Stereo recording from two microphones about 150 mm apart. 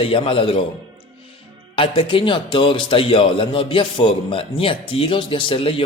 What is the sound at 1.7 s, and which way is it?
A man's voice, 35° left (ahead or behind).